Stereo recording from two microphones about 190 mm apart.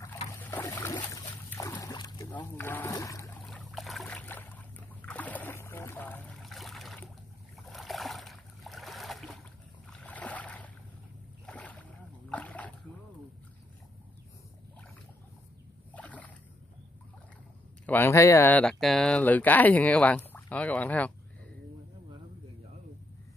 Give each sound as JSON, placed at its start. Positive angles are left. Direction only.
{"t": 0.3, "sound": "boat", "side_deg": 15}
{"t": 2.3, "sound": "a sound", "side_deg": 10}
{"t": 7.5, "sound": "boat", "side_deg": 0}
{"t": 12.3, "sound": "splash", "side_deg": 5}
{"t": 15.9, "sound": "a sound", "side_deg": 5}
{"t": 17.8, "sound": "speech", "side_deg": 10}